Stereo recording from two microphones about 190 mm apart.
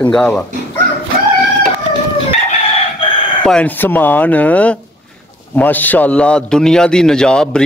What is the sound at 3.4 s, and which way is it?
A man's voice, 5° left (ahead or behind).